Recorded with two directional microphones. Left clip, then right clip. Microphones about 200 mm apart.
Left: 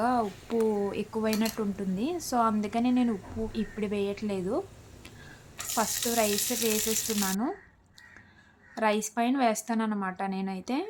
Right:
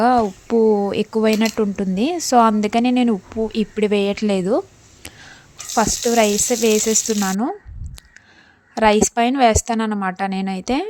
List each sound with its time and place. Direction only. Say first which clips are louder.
0.0 s speech: right 12 dB; 35° right (ahead or behind)
5.7 s speech: right 12 dB; 35° right (ahead or behind)
8.7 s speech: right 13 dB; 35° right (ahead or behind)